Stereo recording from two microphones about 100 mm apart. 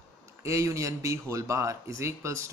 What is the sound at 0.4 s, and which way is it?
A man's voice, 30° right (ahead or behind).